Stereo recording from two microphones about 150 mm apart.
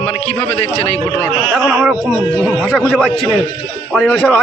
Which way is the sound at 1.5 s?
5° right (ahead or behind).